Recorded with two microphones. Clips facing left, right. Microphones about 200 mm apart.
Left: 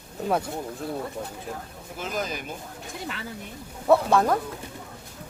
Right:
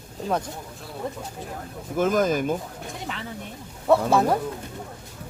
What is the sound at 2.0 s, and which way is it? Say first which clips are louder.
Speech: right 10 dB; 50° right (ahead or behind).